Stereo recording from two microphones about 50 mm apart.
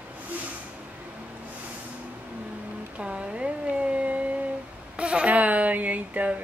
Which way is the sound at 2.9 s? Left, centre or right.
Right.